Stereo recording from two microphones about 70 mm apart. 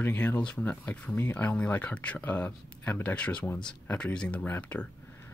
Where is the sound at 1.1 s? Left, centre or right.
Left.